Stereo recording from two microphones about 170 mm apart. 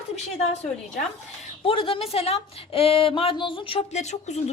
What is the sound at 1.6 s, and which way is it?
A woman's voice, 30° left (ahead or behind).